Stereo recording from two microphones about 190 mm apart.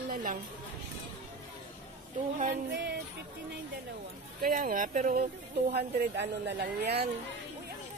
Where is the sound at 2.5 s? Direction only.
65° right (ahead or behind).